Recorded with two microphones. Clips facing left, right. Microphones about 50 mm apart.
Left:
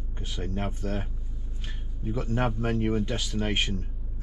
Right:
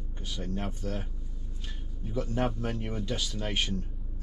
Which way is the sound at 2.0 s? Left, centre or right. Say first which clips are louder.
Left 2 dB; left.